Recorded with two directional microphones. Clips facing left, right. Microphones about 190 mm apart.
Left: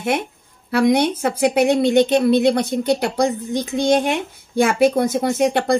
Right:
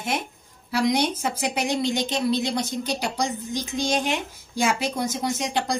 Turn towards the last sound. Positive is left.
turn(degrees=60)  # may be behind; listen again after turning